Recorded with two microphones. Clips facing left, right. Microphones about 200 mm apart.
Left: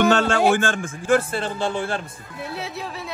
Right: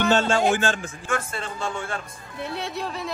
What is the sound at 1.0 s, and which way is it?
A man's voice, 30° left (ahead or behind).